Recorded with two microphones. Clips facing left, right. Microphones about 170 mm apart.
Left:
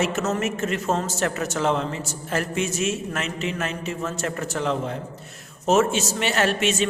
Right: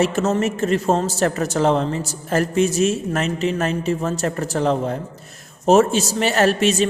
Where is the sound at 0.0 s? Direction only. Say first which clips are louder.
Right 5 dB; 30° right (ahead or behind).